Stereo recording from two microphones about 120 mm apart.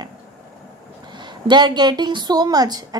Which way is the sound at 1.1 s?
40° right (ahead or behind).